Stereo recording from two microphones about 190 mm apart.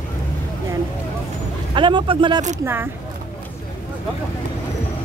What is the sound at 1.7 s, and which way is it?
Speech, 25° right (ahead or behind).